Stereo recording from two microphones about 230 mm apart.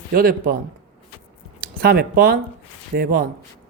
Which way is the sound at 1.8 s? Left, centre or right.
Right.